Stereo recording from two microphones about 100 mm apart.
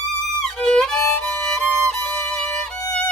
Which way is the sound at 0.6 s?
10° left (ahead or behind).